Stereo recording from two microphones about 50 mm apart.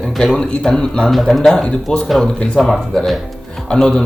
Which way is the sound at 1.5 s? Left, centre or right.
Centre.